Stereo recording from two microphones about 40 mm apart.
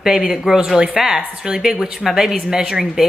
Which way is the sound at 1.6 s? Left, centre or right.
Centre.